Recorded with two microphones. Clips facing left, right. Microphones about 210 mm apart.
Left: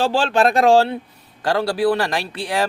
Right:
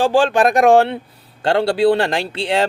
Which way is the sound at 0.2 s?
15° right (ahead or behind).